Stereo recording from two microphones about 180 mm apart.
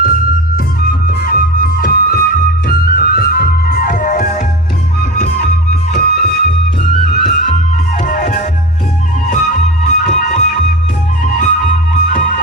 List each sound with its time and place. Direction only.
1.0 s flute: 55° left (ahead or behind)
6.1 s music: 55° left (ahead or behind)